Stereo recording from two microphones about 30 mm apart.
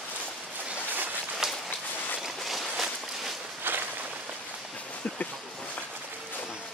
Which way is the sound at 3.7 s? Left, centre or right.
Right.